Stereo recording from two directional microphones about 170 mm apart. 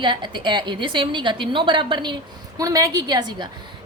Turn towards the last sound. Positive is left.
turn(degrees=-25)  # may be behind; listen again after turning